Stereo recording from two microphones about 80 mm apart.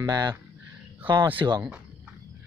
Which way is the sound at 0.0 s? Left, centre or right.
Right.